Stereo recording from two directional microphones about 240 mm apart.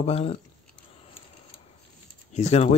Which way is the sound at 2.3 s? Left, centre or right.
Left.